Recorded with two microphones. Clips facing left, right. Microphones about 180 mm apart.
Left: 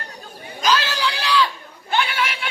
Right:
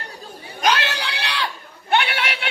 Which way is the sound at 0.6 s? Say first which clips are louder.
Left 1 dB; 65° right (ahead or behind).